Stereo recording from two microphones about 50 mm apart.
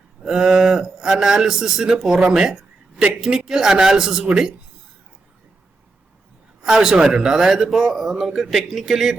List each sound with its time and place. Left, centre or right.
0.2 s speech: centre
6.6 s speech: centre